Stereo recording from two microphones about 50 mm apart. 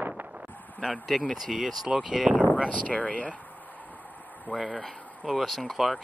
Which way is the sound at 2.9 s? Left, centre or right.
Left.